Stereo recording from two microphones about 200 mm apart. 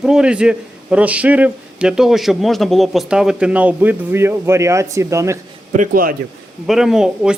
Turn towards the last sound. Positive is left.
turn(degrees=0)  # may be behind; listen again after turning